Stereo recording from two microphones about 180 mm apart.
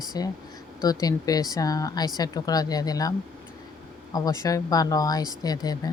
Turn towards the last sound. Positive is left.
turn(degrees=20)  # may be behind; listen again after turning